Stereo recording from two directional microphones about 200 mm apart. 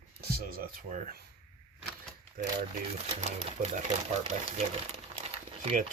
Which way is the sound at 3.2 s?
35° right (ahead or behind).